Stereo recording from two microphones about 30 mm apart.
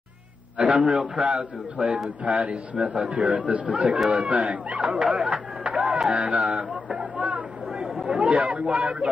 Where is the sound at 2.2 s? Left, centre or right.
Right.